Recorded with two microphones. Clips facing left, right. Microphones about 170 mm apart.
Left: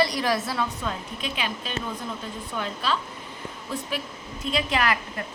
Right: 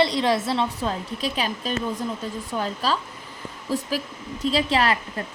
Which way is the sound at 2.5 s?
40° right (ahead or behind).